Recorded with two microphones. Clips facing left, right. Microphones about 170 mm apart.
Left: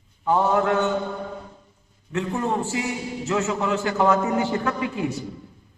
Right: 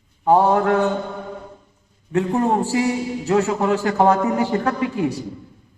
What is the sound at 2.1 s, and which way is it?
A man's voice, 35° right (ahead or behind).